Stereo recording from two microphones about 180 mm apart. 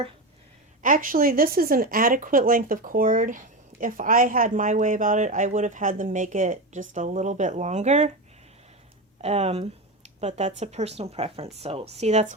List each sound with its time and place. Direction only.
0.8 s speech: 50° right (ahead or behind)
9.2 s speech: 35° right (ahead or behind)